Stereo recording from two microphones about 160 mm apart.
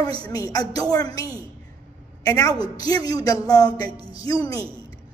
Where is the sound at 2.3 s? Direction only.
20° left (ahead or behind).